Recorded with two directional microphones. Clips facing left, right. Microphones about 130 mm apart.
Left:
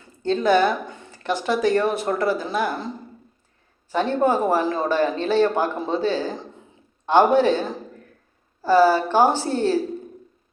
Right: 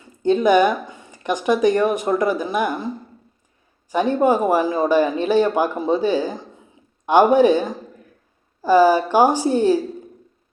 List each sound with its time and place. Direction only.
0.2 s speech: 15° right (ahead or behind)